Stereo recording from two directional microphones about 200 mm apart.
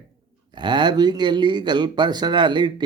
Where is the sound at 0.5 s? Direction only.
20° right (ahead or behind).